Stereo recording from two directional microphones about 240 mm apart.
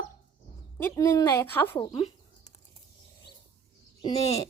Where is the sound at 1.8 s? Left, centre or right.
Left.